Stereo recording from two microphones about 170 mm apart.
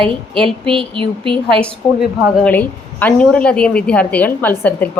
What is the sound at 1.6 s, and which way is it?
A woman's voice, centre (ahead or behind).